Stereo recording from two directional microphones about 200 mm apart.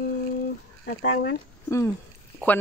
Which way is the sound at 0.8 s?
55° left (ahead or behind).